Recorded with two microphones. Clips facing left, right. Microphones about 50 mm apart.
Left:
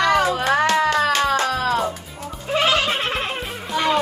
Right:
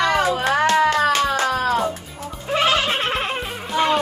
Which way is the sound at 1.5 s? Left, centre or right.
Right.